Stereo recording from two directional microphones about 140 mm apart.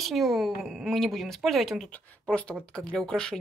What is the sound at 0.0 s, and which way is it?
A woman's voice, centre (ahead or behind).